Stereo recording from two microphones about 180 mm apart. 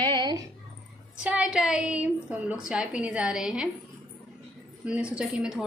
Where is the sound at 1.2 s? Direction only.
5° right (ahead or behind).